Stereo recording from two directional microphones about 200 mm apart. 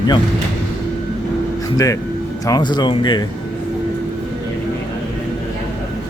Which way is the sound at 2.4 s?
20° left (ahead or behind).